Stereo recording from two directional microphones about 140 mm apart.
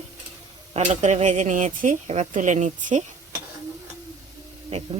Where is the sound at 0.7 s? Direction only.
55° right (ahead or behind).